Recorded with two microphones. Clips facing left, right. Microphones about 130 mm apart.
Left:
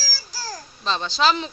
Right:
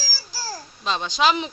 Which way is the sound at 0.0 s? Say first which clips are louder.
Even; 10° right (ahead or behind).